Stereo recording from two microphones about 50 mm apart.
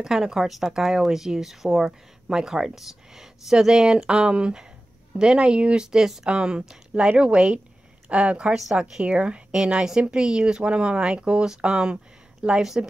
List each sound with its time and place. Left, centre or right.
0.0 s speech: centre